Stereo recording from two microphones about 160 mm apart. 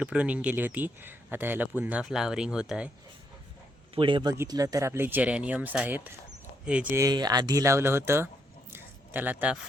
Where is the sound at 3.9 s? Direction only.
30° right (ahead or behind); by 7.0 s 10° right (ahead or behind).